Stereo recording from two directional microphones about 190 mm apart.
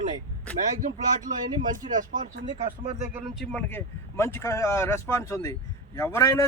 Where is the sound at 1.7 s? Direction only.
45° right (ahead or behind).